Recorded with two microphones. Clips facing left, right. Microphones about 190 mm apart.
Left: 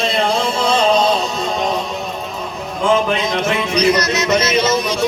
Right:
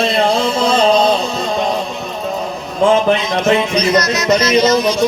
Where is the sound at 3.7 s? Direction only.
30° left (ahead or behind).